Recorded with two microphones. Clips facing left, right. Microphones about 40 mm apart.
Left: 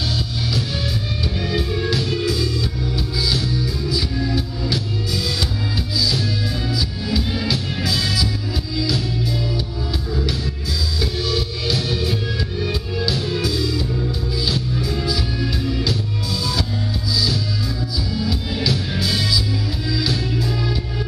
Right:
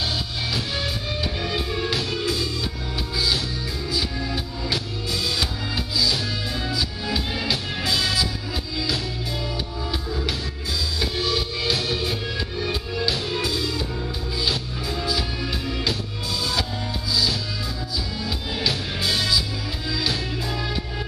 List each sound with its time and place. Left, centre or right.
1.4 s music: centre
11.0 s music: centre
17.1 s music: centre